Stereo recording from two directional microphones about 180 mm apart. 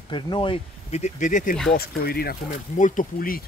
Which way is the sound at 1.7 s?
60° left (ahead or behind).